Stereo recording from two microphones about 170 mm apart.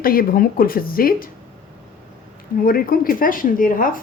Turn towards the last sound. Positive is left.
turn(degrees=55)  # may be behind; listen again after turning